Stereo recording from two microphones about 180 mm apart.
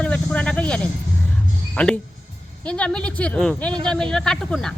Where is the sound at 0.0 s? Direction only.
5° left (ahead or behind).